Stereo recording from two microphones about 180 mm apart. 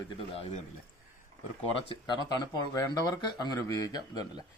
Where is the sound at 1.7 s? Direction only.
25° left (ahead or behind).